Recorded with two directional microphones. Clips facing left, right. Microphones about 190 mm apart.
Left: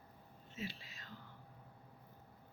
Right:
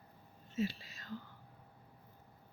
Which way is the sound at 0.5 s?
40° right (ahead or behind).